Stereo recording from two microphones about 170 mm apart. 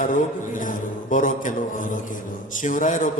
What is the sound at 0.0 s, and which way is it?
A man's voice, 50° left (ahead or behind).